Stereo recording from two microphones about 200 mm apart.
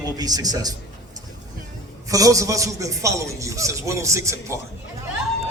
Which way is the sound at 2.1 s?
15° right (ahead or behind).